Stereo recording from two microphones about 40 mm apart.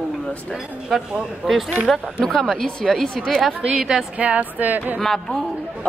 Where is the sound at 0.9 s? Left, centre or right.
Centre.